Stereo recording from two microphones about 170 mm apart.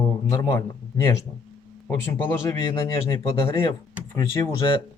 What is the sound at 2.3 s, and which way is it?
Speech, 20° left (ahead or behind).